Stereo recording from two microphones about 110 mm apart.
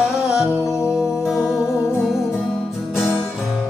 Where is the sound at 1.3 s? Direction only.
30° left (ahead or behind).